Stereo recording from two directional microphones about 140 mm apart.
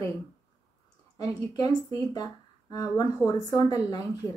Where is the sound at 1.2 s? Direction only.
25° left (ahead or behind).